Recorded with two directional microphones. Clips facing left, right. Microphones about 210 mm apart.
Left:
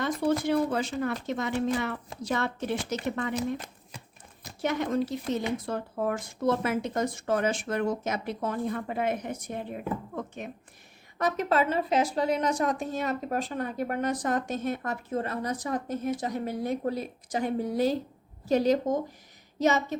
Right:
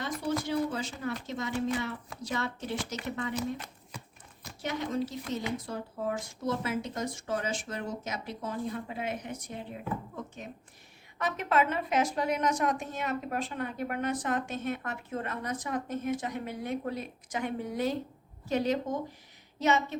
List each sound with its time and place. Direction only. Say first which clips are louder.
0.0 s speech: left 6 dB; 60° left (ahead or behind)
4.6 s speech: left 5 dB; 55° left (ahead or behind)
11.2 s a woman's voice: left 3 dB; 40° left (ahead or behind)